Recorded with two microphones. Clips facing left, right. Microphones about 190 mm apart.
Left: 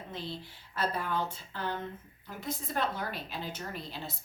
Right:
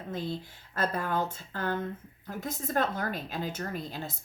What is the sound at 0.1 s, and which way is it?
Speech, 45° right (ahead or behind).